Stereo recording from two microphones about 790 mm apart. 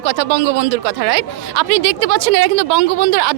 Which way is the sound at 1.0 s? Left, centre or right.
Right.